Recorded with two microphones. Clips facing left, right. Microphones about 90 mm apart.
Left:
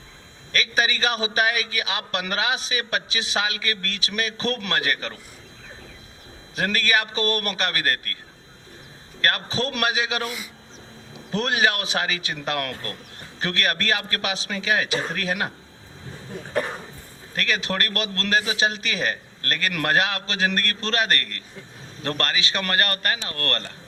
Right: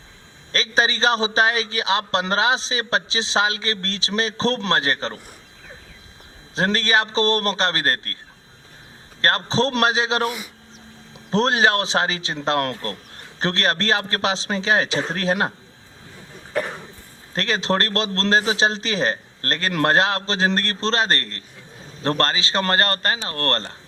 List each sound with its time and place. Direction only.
0.5 s a man's voice: 30° right (ahead or behind)
6.6 s a man's voice: 30° right (ahead or behind)
9.2 s a man's voice: 30° right (ahead or behind)
17.3 s a man's voice: 30° right (ahead or behind)